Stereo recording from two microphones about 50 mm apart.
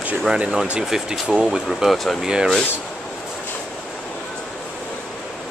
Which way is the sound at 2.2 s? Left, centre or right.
Centre.